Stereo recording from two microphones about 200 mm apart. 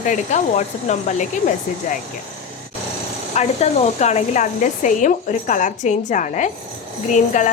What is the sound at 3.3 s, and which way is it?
Speech, 35° left (ahead or behind).